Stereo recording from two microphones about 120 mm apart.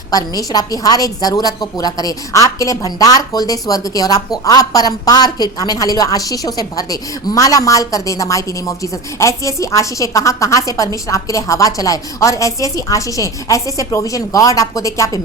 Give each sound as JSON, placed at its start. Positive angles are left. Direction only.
{"t": 0.1, "sound": "a woman's voice", "side_deg": 30}